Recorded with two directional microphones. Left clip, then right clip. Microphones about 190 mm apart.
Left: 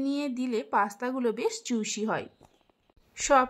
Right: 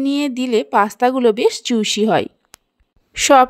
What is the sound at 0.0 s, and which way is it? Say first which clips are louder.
A woman's voice: right 11 dB; 40° right (ahead or behind).